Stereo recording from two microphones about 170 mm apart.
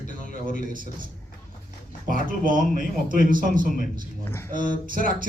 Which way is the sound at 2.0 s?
55° right (ahead or behind).